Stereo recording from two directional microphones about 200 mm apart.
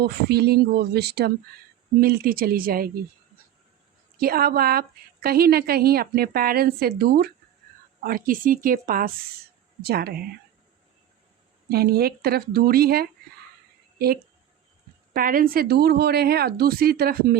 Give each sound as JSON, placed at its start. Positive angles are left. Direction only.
{"t": 0.0, "sound": "a woman's voice", "side_deg": -55}
{"t": 4.2, "sound": "a woman's voice", "side_deg": -50}
{"t": 11.7, "sound": "a woman's voice", "side_deg": -50}
{"t": 15.1, "sound": "a woman's voice", "side_deg": -45}